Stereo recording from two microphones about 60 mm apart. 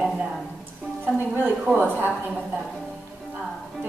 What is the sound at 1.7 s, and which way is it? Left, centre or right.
Speech, right.